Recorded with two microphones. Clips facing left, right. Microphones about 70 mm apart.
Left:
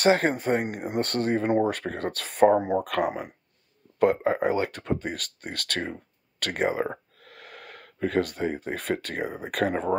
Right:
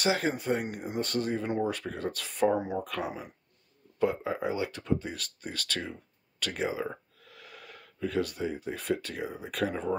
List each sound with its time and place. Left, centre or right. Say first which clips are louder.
0.0 s speech: left 7 dB; left